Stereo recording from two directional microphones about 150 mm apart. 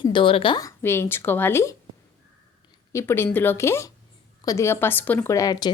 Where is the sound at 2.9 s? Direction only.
15° left (ahead or behind).